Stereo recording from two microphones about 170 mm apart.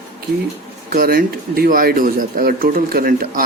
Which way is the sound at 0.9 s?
60° right (ahead or behind).